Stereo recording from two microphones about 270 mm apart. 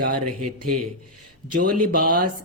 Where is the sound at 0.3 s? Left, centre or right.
Right.